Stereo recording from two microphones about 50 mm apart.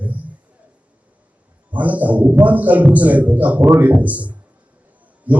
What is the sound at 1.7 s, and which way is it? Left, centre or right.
A man's voice, right.